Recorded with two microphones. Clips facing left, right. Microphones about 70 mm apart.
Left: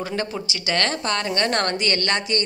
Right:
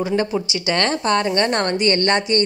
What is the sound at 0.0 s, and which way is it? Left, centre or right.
A woman's voice, centre.